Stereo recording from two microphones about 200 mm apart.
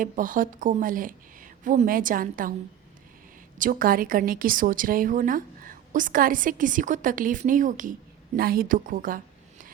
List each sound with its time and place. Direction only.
0.0 s a woman's voice: 40° right (ahead or behind)
3.6 s a woman's voice: 45° right (ahead or behind)